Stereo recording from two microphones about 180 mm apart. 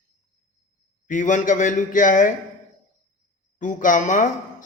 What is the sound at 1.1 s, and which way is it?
Speech, 45° left (ahead or behind).